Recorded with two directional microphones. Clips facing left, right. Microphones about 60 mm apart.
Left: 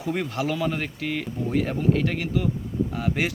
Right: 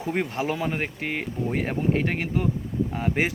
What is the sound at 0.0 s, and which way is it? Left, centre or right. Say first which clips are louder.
Speech: even; right.